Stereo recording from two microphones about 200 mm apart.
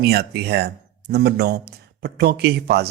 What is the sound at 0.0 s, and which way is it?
Speech, 55° right (ahead or behind).